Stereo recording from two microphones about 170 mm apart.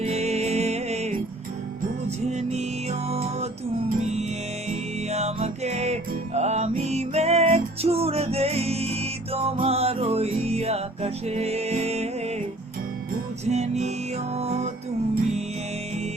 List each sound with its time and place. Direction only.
0.0 s music: 40° right (ahead or behind)
13.4 s music: 40° right (ahead or behind)